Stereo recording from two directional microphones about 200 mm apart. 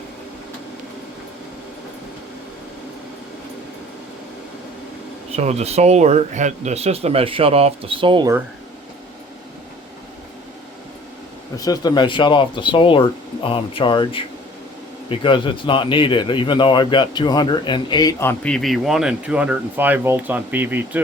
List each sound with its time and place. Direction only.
5.4 s speech: 35° right (ahead or behind)
11.5 s a man's voice: 20° left (ahead or behind); by 21.0 s 10° right (ahead or behind)